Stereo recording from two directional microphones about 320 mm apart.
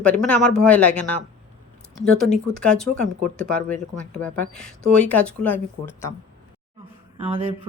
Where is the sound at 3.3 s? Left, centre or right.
Centre.